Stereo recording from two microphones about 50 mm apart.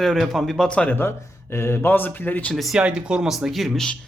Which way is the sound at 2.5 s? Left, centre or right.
Centre.